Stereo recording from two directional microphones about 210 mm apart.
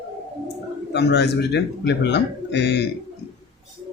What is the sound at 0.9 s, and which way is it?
Speech, 55° left (ahead or behind).